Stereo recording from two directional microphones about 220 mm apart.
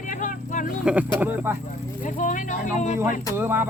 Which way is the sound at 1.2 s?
10° right (ahead or behind).